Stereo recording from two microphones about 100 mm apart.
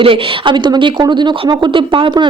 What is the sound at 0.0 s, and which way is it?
Speech, 60° right (ahead or behind).